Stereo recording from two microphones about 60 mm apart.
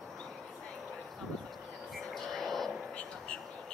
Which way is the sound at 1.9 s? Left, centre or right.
Centre.